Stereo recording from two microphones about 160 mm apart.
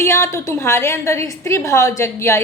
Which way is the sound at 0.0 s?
15° left (ahead or behind).